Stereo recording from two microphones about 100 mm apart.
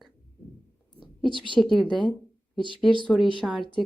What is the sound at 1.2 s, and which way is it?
Speech, 55° right (ahead or behind).